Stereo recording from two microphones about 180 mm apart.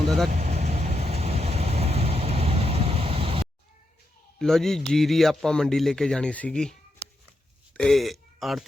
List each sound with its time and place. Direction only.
0.3 s vehicle: 40° right (ahead or behind)
4.4 s speech: 5° left (ahead or behind)
7.8 s speech: centre (ahead or behind)